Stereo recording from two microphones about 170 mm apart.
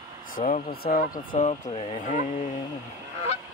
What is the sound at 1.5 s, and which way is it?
Speech, 40° left (ahead or behind).